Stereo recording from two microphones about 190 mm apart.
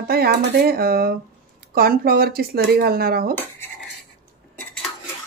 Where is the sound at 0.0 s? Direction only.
55° right (ahead or behind).